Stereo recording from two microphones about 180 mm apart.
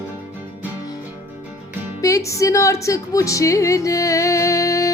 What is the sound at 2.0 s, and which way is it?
Speech, 15° left (ahead or behind).